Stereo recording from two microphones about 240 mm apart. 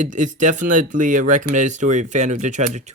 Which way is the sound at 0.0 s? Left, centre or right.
Right.